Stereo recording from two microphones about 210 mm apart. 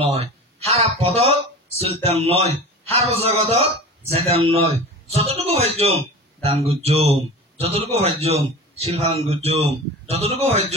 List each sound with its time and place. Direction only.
0.0 s a man's voice: 30° right (ahead or behind)